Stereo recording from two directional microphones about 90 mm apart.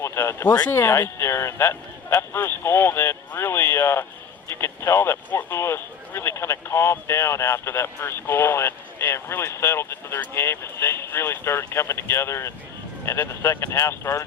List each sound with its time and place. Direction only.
0.0 s speech: 30° left (ahead or behind)